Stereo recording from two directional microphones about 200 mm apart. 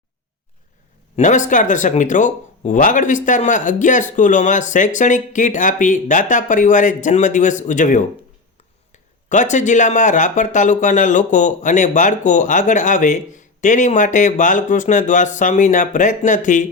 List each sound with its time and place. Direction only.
1.1 s speech: 35° left (ahead or behind)